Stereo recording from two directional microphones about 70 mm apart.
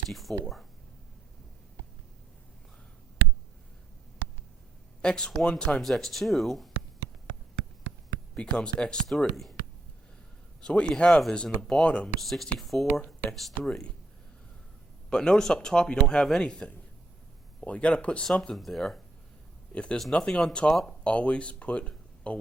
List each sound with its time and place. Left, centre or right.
0.1 s speech: centre
5.0 s speech: centre
5.8 s speech: centre
8.4 s speech: centre
10.6 s speech: centre
12.2 s speech: centre
15.1 s speech: centre
18.5 s speech: centre
19.7 s speech: centre